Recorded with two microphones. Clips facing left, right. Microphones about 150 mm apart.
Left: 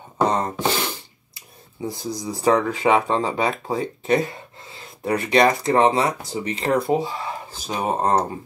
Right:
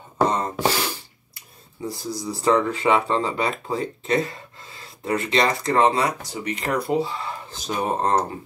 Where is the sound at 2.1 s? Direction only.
15° left (ahead or behind).